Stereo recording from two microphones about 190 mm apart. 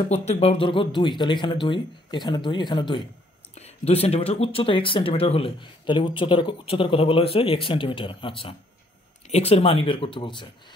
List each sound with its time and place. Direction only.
0.1 s speech: 35° left (ahead or behind)